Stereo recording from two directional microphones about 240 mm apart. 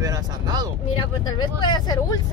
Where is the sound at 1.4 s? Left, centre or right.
Centre.